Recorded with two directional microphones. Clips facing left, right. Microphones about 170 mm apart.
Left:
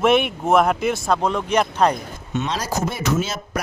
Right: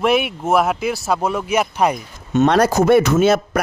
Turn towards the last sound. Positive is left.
turn(degrees=-60)  # may be behind; listen again after turning